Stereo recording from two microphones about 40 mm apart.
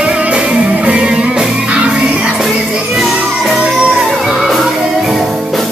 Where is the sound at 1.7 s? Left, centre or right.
Right.